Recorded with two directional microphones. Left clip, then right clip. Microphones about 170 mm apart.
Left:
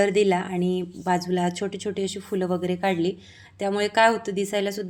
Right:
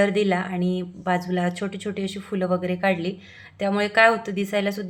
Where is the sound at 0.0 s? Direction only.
35° left (ahead or behind).